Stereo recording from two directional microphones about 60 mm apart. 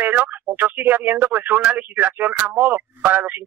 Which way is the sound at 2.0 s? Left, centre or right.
Right.